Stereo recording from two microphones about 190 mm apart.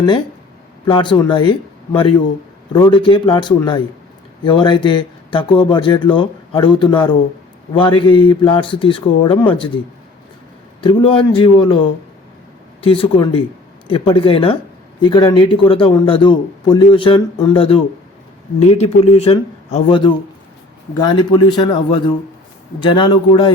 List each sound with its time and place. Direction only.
0.9 s a man's voice: 25° left (ahead or behind)
12.8 s a man's voice: 30° left (ahead or behind)